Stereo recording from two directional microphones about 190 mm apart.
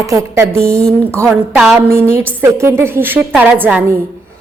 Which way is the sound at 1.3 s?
Centre (ahead or behind).